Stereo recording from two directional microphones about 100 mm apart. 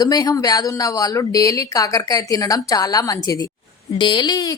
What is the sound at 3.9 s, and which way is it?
Speech, 50° left (ahead or behind).